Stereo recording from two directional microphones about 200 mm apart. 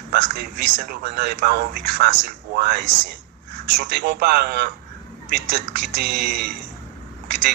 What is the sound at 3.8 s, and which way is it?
Speech, 55° right (ahead or behind).